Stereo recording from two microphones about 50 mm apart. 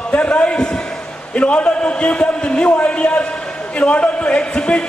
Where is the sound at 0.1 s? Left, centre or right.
Left.